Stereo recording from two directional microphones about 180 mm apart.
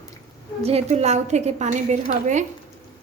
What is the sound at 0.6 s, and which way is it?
A woman's voice, 35° right (ahead or behind).